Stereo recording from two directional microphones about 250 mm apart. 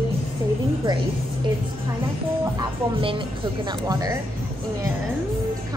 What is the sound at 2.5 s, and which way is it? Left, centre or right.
Speech, right.